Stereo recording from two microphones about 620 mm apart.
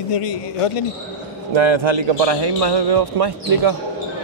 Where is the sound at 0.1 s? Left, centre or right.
Left.